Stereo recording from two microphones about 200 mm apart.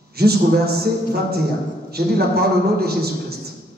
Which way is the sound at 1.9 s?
50° right (ahead or behind).